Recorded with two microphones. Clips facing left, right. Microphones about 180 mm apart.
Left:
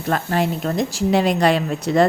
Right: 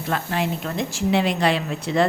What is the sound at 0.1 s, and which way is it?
A woman's voice, 45° left (ahead or behind).